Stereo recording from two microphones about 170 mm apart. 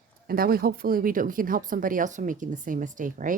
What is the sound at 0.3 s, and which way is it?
Speech, 60° right (ahead or behind).